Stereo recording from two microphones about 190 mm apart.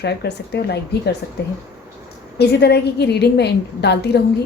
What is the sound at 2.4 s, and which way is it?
Speech, 60° left (ahead or behind).